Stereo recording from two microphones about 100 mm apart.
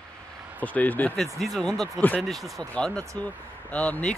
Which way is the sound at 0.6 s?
15° left (ahead or behind).